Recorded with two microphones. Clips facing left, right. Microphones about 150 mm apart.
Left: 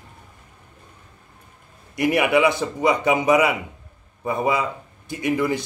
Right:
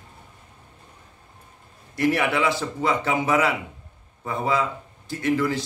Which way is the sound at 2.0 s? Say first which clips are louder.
Left 4 dB; 15° left (ahead or behind).